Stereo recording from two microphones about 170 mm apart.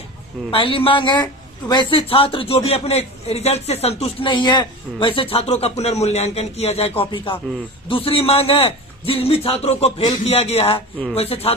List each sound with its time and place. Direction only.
0.5 s a man's voice: 30° left (ahead or behind)